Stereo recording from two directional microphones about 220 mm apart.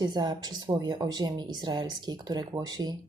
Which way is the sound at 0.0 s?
20° right (ahead or behind).